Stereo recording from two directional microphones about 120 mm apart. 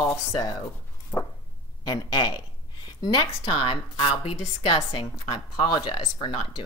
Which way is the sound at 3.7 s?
50° left (ahead or behind).